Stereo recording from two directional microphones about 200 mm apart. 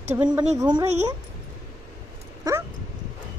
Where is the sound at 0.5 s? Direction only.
20° right (ahead or behind).